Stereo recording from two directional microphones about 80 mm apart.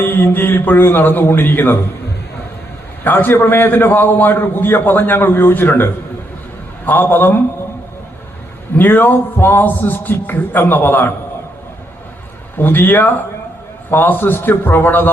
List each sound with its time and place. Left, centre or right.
0.0 s a man's voice: left
3.0 s a man's voice: left
8.7 s a man's voice: left
12.5 s a man's voice: left